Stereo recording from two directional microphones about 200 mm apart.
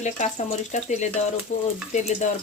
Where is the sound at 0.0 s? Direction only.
35° left (ahead or behind).